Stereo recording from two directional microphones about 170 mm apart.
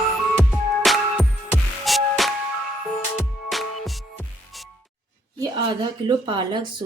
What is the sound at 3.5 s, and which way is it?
Music, centre (ahead or behind).